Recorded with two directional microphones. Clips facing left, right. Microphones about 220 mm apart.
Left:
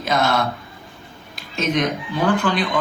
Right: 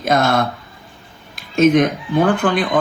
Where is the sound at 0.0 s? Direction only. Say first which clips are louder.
Right 4 dB; 50° right (ahead or behind).